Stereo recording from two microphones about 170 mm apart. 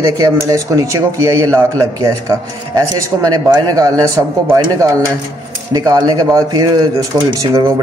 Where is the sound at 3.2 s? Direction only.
20° right (ahead or behind).